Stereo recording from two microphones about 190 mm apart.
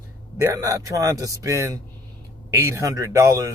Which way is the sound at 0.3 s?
15° right (ahead or behind).